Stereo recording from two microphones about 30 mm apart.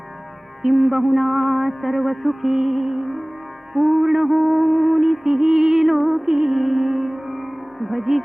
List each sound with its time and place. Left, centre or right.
0.6 s music: centre
6.5 s music: centre